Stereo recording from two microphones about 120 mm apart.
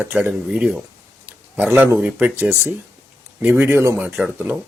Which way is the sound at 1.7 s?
15° right (ahead or behind).